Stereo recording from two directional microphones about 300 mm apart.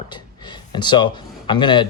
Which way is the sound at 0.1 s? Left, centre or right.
Centre.